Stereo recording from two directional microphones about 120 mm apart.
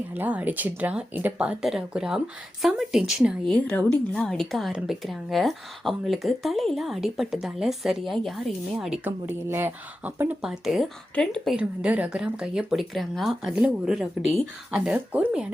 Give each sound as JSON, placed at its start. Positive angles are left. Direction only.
{"t": 0.1, "sound": "speech", "side_deg": -15}
{"t": 3.4, "sound": "a woman's voice", "side_deg": 10}
{"t": 9.0, "sound": "speech", "side_deg": -20}
{"t": 10.4, "sound": "a woman's voice", "side_deg": -5}
{"t": 11.5, "sound": "a woman's voice", "side_deg": -10}